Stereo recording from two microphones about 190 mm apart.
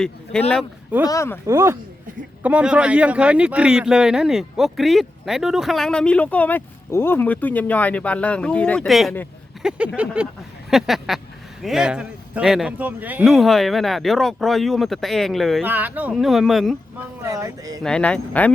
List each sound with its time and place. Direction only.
0.0 s speech: 5° left (ahead or behind)
1.0 s speech: 15° left (ahead or behind)
1.5 s speech: 15° right (ahead or behind)
17.2 s speech: 15° right (ahead or behind)
17.8 s speech: 5° left (ahead or behind)